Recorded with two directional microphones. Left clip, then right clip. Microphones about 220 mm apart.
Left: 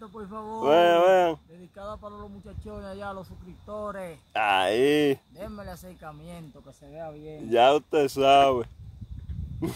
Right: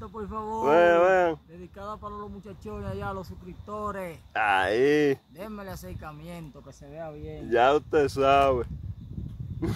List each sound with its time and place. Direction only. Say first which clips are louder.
0.0 s speech: right 4 dB; 10° right (ahead or behind)
0.7 s a sound: left 1 dB; 30° left (ahead or behind)
1.8 s speech: right 2 dB; 15° right (ahead or behind)
4.3 s speech: left 1 dB; 25° left (ahead or behind)
5.4 s speech: right 1 dB; 15° right (ahead or behind)
7.4 s speech: left 2 dB; 25° left (ahead or behind)
9.6 s a sound: even; 25° left (ahead or behind)